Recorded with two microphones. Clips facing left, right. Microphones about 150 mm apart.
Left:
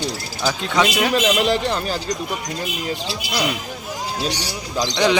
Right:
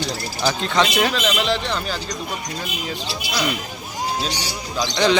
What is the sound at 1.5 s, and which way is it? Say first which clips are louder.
Speech: left 3 dB; 40° left (ahead or behind).